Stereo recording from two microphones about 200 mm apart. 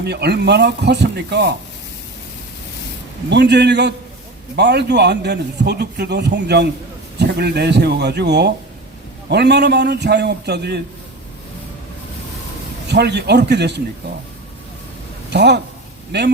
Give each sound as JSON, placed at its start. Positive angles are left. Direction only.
{"t": 0.0, "sound": "a man's voice", "side_deg": -55}
{"t": 3.2, "sound": "a man's voice", "side_deg": -60}
{"t": 12.9, "sound": "a man's voice", "side_deg": -55}
{"t": 15.3, "sound": "a man's voice", "side_deg": -60}